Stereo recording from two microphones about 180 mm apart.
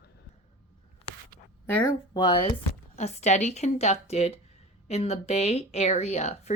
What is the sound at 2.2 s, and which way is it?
Speech, 25° left (ahead or behind).